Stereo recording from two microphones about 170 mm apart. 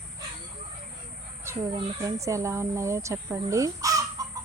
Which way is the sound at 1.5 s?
15° right (ahead or behind).